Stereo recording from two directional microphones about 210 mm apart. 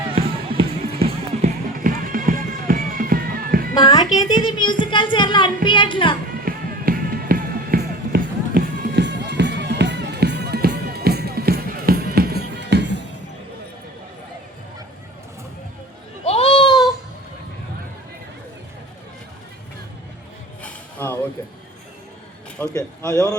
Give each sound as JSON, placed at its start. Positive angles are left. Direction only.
{"t": 0.1, "sound": "run", "side_deg": -25}
{"t": 1.4, "sound": "music", "side_deg": -40}
{"t": 3.8, "sound": "a child's voice", "side_deg": 20}
{"t": 6.4, "sound": "music", "side_deg": -45}
{"t": 16.2, "sound": "a sound", "side_deg": 30}
{"t": 20.6, "sound": "music", "side_deg": 10}
{"t": 22.6, "sound": "speech", "side_deg": 10}